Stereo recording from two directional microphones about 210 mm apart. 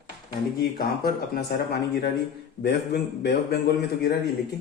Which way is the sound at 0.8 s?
45° left (ahead or behind).